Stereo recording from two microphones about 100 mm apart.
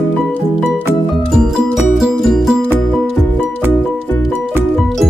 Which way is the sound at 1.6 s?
Centre (ahead or behind).